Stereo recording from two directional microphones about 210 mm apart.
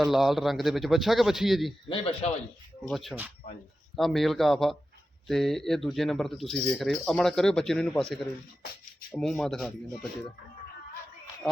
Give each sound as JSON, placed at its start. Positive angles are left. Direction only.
{"t": 0.0, "sound": "speech", "side_deg": 0}
{"t": 1.9, "sound": "a man's voice", "side_deg": 25}
{"t": 2.8, "sound": "speech", "side_deg": 0}
{"t": 9.1, "sound": "speech", "side_deg": 0}